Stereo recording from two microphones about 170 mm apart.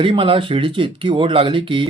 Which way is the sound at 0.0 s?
30° right (ahead or behind).